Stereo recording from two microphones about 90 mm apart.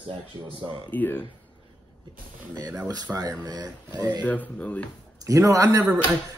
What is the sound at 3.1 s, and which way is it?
Speech, 20° right (ahead or behind).